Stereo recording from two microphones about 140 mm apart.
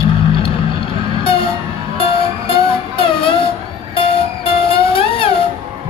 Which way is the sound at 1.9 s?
40° left (ahead or behind).